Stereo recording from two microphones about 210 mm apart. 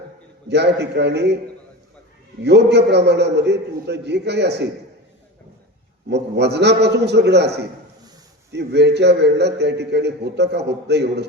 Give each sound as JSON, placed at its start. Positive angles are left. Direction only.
{"t": 0.4, "sound": "a man's voice", "side_deg": -55}
{"t": 2.4, "sound": "a man's voice", "side_deg": -55}
{"t": 6.1, "sound": "a man's voice", "side_deg": -55}